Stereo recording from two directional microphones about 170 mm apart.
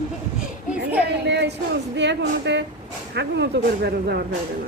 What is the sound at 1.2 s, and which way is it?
Speech, 85° right.